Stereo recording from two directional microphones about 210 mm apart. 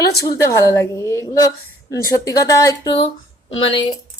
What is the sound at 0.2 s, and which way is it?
A woman's voice, 15° left (ahead or behind).